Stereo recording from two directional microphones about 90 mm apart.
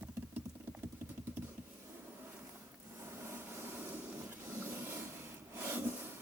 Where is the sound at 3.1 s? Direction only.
30° right (ahead or behind).